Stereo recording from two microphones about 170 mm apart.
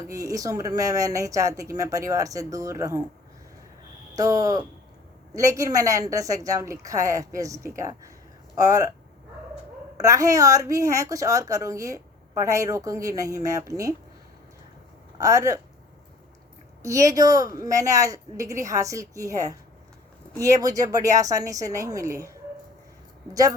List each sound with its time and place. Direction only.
0.1 s speech: 20° right (ahead or behind)
4.1 s speech: 20° right (ahead or behind)
10.0 s speech: 20° right (ahead or behind)
15.2 s speech: 20° right (ahead or behind)
16.8 s speech: 20° right (ahead or behind)